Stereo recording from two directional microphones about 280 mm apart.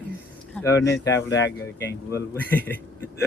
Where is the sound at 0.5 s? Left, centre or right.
Centre.